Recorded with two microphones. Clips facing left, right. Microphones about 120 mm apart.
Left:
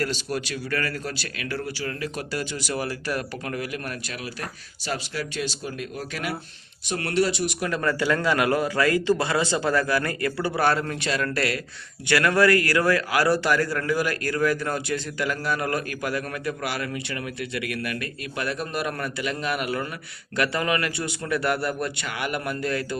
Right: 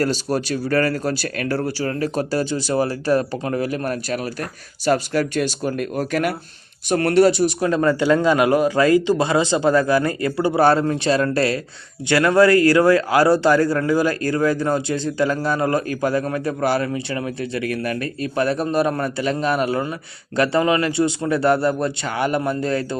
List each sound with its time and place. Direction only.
0.0 s a man's voice: 35° right (ahead or behind)